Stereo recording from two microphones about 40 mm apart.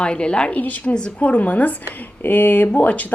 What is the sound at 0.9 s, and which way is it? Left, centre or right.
Speech, left.